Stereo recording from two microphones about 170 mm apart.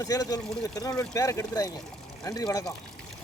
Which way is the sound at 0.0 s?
20° left (ahead or behind).